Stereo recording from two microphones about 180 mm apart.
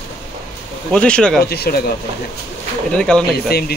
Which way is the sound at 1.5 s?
60° left (ahead or behind).